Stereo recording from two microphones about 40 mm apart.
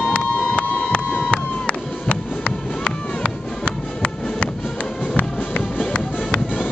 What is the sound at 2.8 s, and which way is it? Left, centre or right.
Music, left.